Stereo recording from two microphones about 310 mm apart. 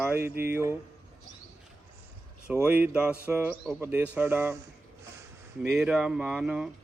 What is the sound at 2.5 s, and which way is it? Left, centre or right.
Speech, centre.